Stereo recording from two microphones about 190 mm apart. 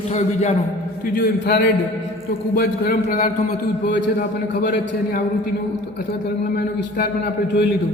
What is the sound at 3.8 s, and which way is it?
Speech, 65° left (ahead or behind).